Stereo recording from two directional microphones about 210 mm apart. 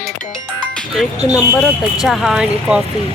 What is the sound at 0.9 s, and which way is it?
Speech, centre (ahead or behind).